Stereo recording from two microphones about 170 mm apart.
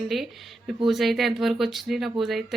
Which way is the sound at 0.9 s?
Centre (ahead or behind).